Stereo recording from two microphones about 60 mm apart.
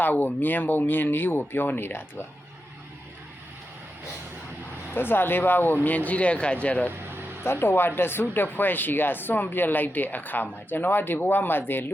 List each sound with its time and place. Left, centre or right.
0.0 s speech: left
4.9 s speech: left
7.4 s speech: left